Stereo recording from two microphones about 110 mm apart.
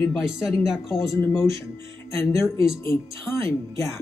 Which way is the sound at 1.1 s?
20° left (ahead or behind).